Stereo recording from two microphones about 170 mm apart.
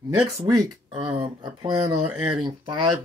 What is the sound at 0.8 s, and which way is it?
Speech, 30° right (ahead or behind).